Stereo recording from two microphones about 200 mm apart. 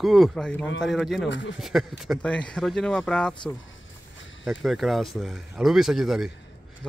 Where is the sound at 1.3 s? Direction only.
65° left (ahead or behind).